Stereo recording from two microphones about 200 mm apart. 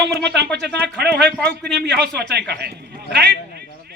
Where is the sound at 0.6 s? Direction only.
55° right (ahead or behind).